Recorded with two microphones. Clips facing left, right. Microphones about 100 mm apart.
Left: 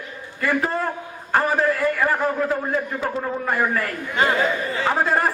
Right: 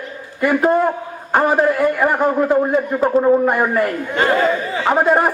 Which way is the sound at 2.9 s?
35° right (ahead or behind).